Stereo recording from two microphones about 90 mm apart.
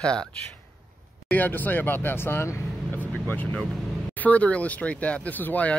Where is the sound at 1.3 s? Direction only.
20° left (ahead or behind).